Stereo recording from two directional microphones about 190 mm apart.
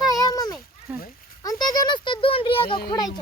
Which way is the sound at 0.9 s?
10° right (ahead or behind).